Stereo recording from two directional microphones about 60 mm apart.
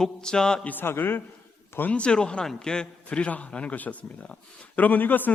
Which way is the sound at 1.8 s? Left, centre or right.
Left.